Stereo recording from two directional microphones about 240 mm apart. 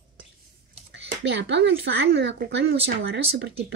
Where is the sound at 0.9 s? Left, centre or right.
Right.